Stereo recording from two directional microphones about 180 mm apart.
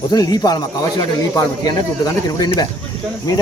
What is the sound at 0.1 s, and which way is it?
Speech, 20° left (ahead or behind).